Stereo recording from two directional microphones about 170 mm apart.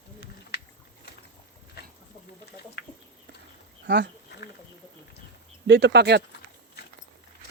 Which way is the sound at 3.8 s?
90° right.